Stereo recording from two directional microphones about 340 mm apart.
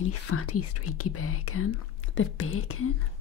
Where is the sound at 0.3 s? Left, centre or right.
Left.